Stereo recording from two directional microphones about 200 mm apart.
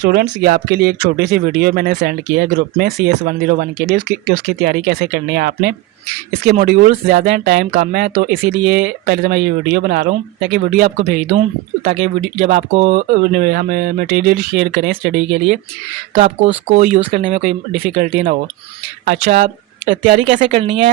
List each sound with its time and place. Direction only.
0.0 s speech: 55° right (ahead or behind)
2.3 s speech: 55° right (ahead or behind)
12.4 s speech: 40° right (ahead or behind)
16.1 s speech: 30° right (ahead or behind)
17.9 s speech: 45° right (ahead or behind)
20.1 s speech: 35° right (ahead or behind)